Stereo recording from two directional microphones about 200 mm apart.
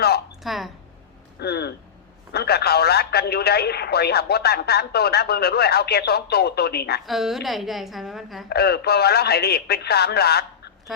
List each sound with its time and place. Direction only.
0.4 s a woman's voice: centre (ahead or behind)
1.4 s a sound: 55° left (ahead or behind)
2.3 s speech: 55° left (ahead or behind)
7.0 s a woman's voice: centre (ahead or behind)
8.4 s speech: 55° left (ahead or behind)